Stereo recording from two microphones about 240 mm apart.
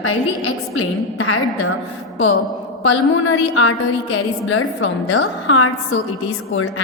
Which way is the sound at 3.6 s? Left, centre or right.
Left.